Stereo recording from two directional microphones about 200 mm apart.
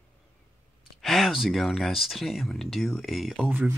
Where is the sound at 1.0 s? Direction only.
Centre (ahead or behind).